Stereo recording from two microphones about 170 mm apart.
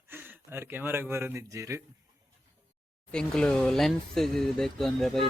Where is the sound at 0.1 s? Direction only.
10° right (ahead or behind).